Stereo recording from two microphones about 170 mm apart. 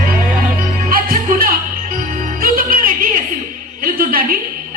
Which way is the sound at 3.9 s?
60° right (ahead or behind).